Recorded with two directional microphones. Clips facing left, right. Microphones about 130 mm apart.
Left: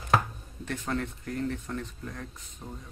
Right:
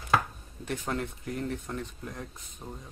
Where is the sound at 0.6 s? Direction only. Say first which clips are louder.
Even; 15° right (ahead or behind).